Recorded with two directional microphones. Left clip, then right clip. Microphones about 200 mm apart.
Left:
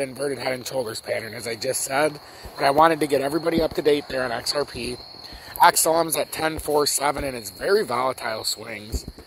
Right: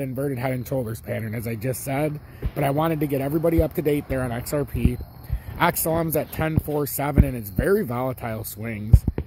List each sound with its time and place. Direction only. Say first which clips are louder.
0.0 s speech: left 1 dB; 5° right (ahead or behind)